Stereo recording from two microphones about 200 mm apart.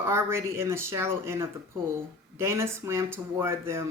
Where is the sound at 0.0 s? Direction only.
15° right (ahead or behind).